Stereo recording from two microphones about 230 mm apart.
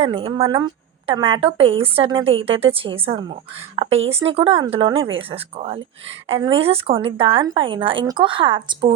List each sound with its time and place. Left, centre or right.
0.0 s a woman's voice: right
3.8 s speech: right
4.1 s a woman's voice: right